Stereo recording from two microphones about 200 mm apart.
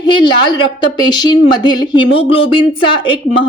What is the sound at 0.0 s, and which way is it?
Speech, 25° left (ahead or behind).